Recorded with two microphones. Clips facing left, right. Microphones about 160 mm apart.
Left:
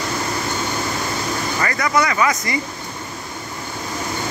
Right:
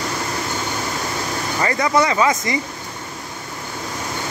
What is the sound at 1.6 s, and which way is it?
Speech, 25° right (ahead or behind).